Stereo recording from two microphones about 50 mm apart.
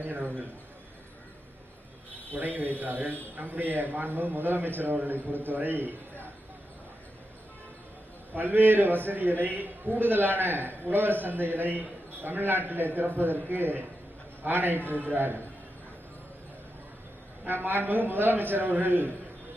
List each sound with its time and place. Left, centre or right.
0.0 s a man's voice: right
2.3 s a man's voice: right
8.3 s a man's voice: right
17.4 s a man's voice: right